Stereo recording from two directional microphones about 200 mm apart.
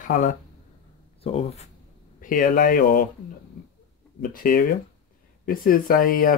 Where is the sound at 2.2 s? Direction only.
45° left (ahead or behind).